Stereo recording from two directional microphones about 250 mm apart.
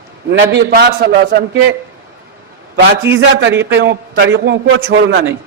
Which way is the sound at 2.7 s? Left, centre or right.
Right.